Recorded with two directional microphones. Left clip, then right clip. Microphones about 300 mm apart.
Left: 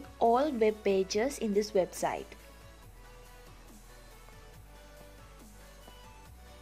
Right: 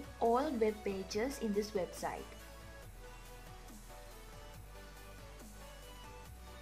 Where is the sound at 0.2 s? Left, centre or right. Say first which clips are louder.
Left 6 dB; centre.